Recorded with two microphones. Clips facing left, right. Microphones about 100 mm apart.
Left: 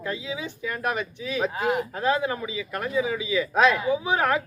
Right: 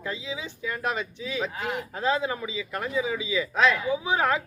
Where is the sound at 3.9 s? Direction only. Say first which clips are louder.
Left 1 dB; 20° right (ahead or behind).